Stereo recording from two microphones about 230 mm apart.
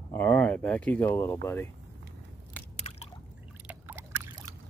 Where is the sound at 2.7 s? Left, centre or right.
Left.